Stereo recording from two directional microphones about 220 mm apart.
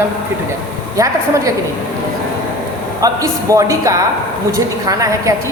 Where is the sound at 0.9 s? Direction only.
15° right (ahead or behind).